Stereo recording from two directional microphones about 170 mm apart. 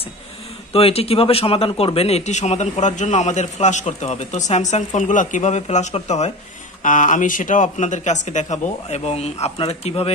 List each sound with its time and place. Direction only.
0.7 s a man's voice: 35° left (ahead or behind)